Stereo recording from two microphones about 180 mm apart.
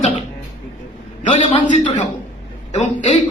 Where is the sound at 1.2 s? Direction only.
40° left (ahead or behind).